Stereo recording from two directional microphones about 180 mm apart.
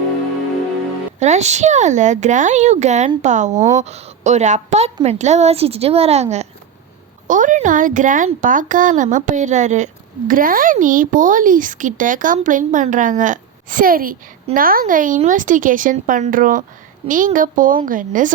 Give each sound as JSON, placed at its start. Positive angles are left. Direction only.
{"t": 1.2, "sound": "a woman's voice", "side_deg": -40}
{"t": 7.3, "sound": "a woman's voice", "side_deg": -45}